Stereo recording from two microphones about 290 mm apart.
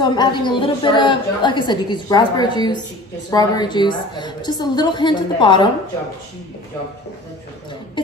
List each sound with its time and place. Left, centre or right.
0.0 s a woman's voice: centre